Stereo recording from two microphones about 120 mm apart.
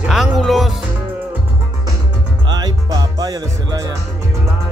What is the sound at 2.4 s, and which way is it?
Music, 35° right (ahead or behind).